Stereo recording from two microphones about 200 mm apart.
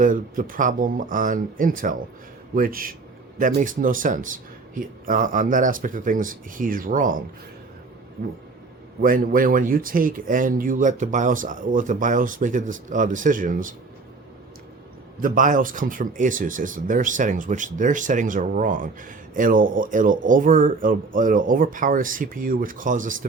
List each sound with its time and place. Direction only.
0.0 s speech: 40° right (ahead or behind)
9.0 s speech: 45° right (ahead or behind)
15.2 s speech: 40° right (ahead or behind)